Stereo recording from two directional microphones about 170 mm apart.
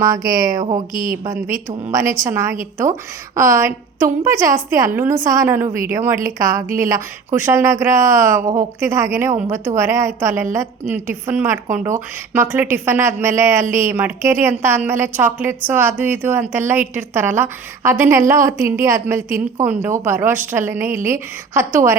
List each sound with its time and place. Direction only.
0.0 s speech: 20° right (ahead or behind)
0.9 s speech: 55° right (ahead or behind)
1.2 s a woman's voice: 20° right (ahead or behind)
5.6 s speech: 55° right (ahead or behind)
6.2 s a woman's voice: 20° right (ahead or behind)